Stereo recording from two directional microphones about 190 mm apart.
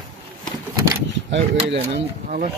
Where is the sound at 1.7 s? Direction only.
65° right (ahead or behind).